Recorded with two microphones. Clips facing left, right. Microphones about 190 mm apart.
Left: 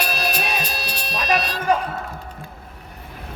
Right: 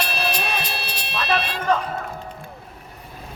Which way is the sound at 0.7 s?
40° left (ahead or behind).